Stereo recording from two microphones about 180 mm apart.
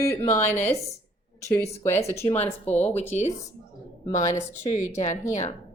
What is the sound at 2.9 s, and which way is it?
A woman's voice, 40° left (ahead or behind).